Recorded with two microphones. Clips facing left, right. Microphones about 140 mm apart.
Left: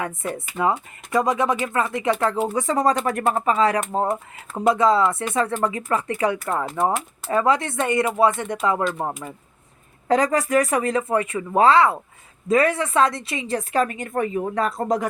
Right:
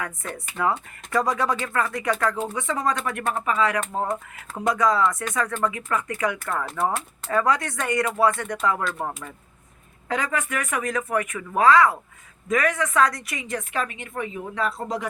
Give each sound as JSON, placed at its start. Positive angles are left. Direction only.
{"t": 0.3, "sound": "speech", "side_deg": 20}
{"t": 2.5, "sound": "a woman's voice", "side_deg": 40}
{"t": 10.1, "sound": "a woman's voice", "side_deg": 35}